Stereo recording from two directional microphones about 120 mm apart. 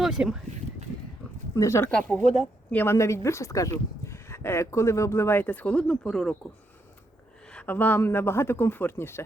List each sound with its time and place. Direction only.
0.0 s speech: 5° right (ahead or behind)
1.5 s speech: 20° left (ahead or behind)
1.9 s a woman's voice: 10° left (ahead or behind)
2.7 s speech: 20° left (ahead or behind); by 6.3 s 5° left (ahead or behind)
7.5 s speech: 15° left (ahead or behind)